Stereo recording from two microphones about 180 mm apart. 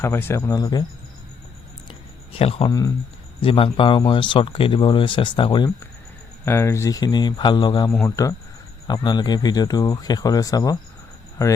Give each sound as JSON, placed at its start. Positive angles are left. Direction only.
{"t": 0.0, "sound": "speech", "side_deg": 15}
{"t": 2.3, "sound": "speech", "side_deg": 35}
{"t": 6.4, "sound": "speech", "side_deg": 15}